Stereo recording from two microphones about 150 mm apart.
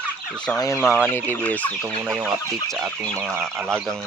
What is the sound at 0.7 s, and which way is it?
Speech, 10° left (ahead or behind).